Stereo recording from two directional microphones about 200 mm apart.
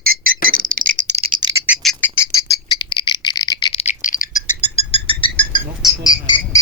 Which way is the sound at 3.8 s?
40° left (ahead or behind).